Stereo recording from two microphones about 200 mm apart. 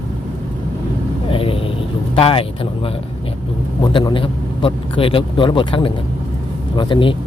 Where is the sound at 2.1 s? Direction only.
30° left (ahead or behind).